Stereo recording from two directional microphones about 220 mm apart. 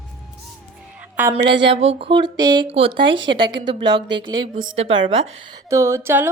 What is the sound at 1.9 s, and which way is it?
A woman's voice, 25° right (ahead or behind).